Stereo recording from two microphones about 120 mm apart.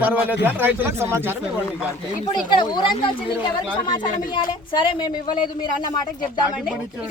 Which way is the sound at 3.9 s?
40° left (ahead or behind).